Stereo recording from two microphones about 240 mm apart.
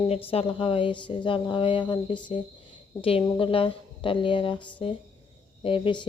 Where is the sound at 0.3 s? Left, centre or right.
Left.